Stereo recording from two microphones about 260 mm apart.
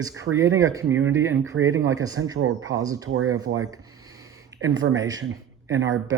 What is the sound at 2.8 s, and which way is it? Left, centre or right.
Speech, centre.